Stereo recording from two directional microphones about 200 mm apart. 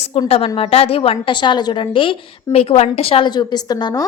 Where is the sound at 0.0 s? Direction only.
30° left (ahead or behind).